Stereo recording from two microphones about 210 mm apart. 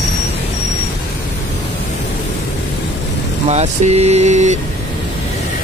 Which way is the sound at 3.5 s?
35° right (ahead or behind).